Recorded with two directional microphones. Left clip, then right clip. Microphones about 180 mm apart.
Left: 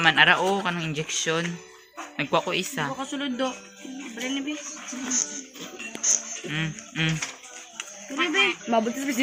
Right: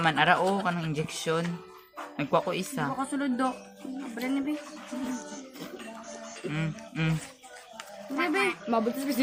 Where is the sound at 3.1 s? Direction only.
65° right (ahead or behind).